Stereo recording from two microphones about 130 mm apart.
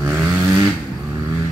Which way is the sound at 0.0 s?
15° right (ahead or behind).